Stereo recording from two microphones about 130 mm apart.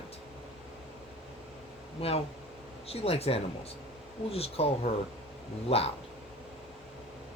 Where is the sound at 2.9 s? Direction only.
50° left (ahead or behind).